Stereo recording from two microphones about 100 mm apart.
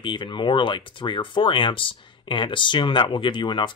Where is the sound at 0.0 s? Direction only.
55° left (ahead or behind).